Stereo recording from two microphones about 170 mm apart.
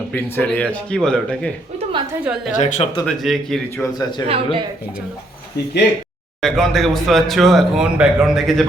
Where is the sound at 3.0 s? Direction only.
Centre (ahead or behind).